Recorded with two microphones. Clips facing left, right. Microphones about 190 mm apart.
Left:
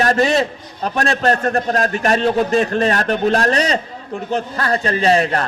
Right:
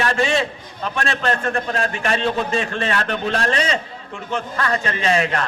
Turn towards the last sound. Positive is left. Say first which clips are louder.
# left 4 dB
turn(degrees=35)  # may be behind; listen again after turning